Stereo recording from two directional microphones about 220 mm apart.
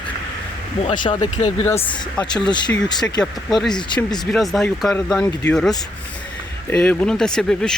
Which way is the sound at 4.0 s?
20° left (ahead or behind).